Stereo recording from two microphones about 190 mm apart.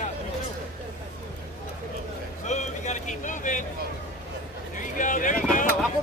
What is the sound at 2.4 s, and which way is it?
Vehicle, 40° left (ahead or behind).